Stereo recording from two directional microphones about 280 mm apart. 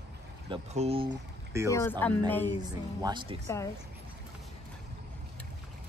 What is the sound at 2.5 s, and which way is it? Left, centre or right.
Speech, centre.